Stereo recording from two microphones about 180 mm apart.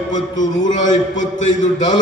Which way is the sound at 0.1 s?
45° left (ahead or behind).